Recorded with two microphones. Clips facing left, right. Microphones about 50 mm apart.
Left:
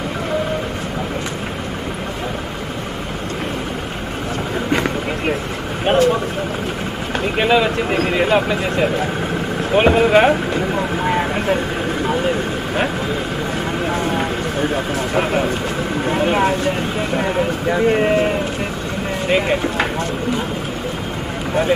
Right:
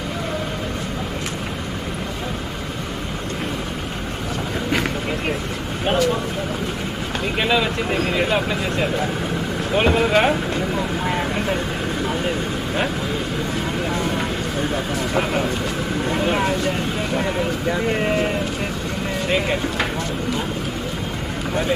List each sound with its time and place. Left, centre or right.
5.9 s vehicle: left
7.3 s vehicle: centre
7.9 s speech: left
10.8 s vehicle: centre
13.8 s vehicle: left
16.1 s vehicle: left
16.4 s speech: left
19.2 s speech: centre